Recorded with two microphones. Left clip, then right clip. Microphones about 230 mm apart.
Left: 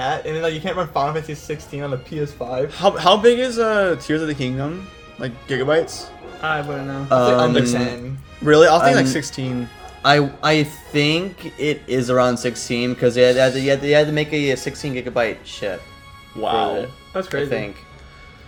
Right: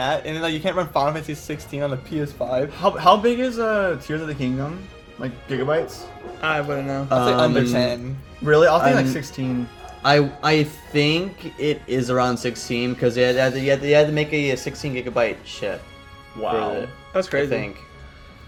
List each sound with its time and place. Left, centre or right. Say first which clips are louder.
0.0 s speech: left 2 dB; right
2.8 s speech: left 3 dB; left
6.4 s speech: even; right
7.1 s speech: left 4 dB; centre
8.4 s speech: left 3 dB; left
10.0 s speech: left 2 dB; centre
17.2 s speech: right 2 dB; right